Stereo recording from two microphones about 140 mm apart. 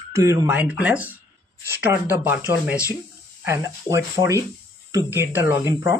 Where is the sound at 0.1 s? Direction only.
20° right (ahead or behind).